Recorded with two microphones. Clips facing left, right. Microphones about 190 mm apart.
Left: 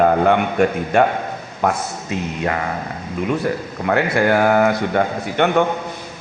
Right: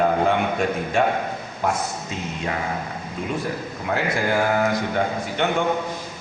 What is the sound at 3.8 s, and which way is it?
A man's voice, 65° left (ahead or behind).